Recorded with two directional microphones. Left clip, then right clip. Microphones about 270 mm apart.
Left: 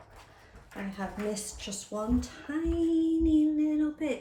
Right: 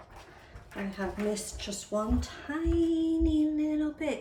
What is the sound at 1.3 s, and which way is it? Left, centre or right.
Speech, centre.